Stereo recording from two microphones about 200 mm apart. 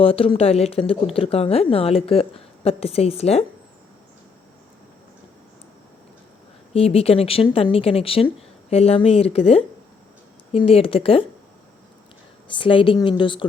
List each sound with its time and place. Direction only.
0.0 s speech: 30° left (ahead or behind)
6.7 s speech: 30° left (ahead or behind)
10.7 s speech: 30° left (ahead or behind)
12.5 s speech: 25° left (ahead or behind)